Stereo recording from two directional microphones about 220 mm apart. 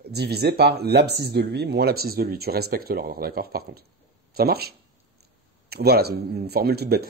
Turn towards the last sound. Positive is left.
turn(degrees=-45)  # may be behind; listen again after turning